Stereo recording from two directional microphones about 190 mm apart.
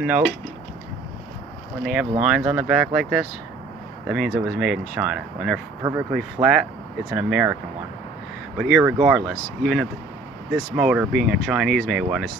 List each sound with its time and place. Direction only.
0.0 s speech: 5° right (ahead or behind)
2.2 s speech: 5° right (ahead or behind)
5.8 s speech: 15° right (ahead or behind)
6.1 s speech: 5° right (ahead or behind)
8.5 s speech: centre (ahead or behind)